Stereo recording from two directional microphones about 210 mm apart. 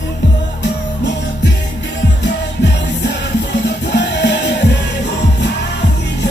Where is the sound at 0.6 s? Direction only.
55° left (ahead or behind).